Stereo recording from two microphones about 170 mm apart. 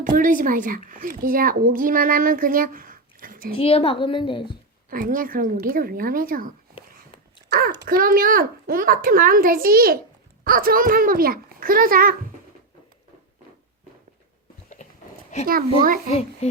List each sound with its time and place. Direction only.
0.0 s speech: 50° right (ahead or behind)
3.5 s a woman's voice: 35° left (ahead or behind)
4.9 s speech: 55° right (ahead or behind)
7.5 s speech: 65° right (ahead or behind)
14.8 s a sound: 45° left (ahead or behind)